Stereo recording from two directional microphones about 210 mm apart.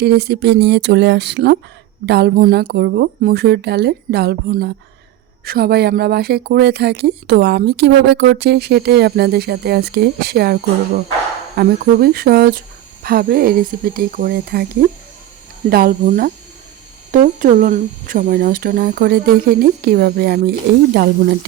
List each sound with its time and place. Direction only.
0.0 s speech: 50° right (ahead or behind)
15.7 s speech: 40° right (ahead or behind)